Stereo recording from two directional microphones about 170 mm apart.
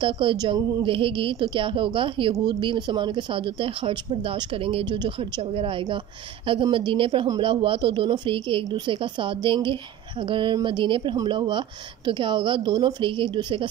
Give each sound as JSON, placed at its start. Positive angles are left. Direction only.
{"t": 0.0, "sound": "a woman's voice", "side_deg": -30}